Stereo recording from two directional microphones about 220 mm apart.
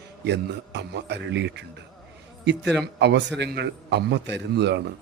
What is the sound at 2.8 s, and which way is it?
A man's voice, 55° right (ahead or behind).